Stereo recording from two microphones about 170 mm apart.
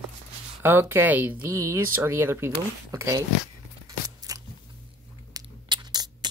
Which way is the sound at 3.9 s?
20° right (ahead or behind).